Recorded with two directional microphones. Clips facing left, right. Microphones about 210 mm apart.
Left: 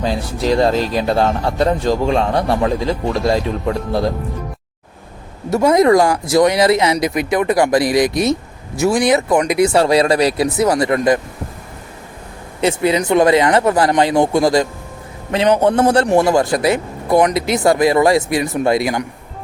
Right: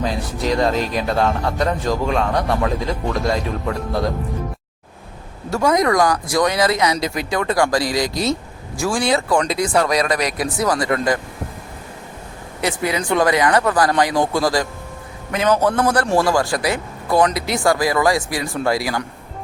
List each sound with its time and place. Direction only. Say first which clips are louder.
0.0 s speech: left 3 dB; 30° left (ahead or behind)
5.5 s speech: left 5 dB; 20° left (ahead or behind)
12.6 s speech: left 6 dB; 25° left (ahead or behind)